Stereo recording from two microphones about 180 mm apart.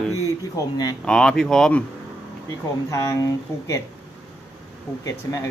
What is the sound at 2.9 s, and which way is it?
Speech, 20° left (ahead or behind).